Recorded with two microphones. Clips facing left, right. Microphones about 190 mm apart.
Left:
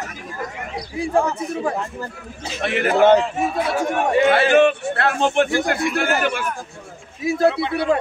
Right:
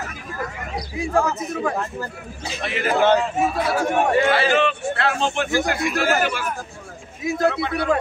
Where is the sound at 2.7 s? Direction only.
60° left (ahead or behind).